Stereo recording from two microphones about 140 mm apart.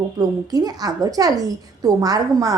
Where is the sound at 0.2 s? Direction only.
25° right (ahead or behind).